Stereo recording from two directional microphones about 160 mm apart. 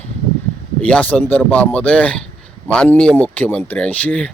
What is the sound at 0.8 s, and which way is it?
Speech, 5° left (ahead or behind).